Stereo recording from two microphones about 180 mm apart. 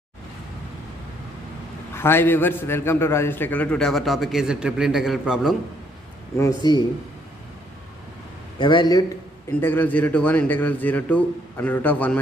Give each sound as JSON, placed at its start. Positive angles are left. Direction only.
{"t": 2.0, "sound": "a man's voice", "side_deg": 10}
{"t": 6.3, "sound": "speech", "side_deg": 20}
{"t": 8.5, "sound": "speech", "side_deg": 25}
{"t": 9.5, "sound": "a man's voice", "side_deg": 10}